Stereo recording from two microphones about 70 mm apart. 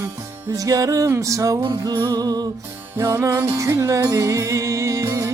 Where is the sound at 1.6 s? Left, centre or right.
Right.